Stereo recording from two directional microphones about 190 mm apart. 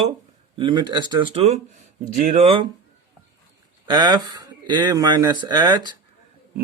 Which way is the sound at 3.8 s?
25° right (ahead or behind).